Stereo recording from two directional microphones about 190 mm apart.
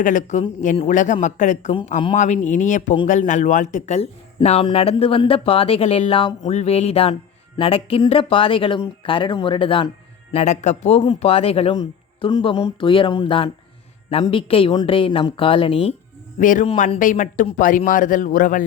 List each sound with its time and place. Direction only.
0.0 s speech: 40° left (ahead or behind)
16.4 s speech: 45° left (ahead or behind)